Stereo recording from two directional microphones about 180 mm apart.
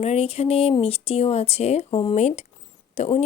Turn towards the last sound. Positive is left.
turn(degrees=35)  # may be behind; listen again after turning